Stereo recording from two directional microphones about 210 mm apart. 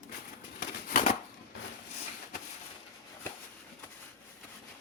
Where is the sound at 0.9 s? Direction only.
40° left (ahead or behind).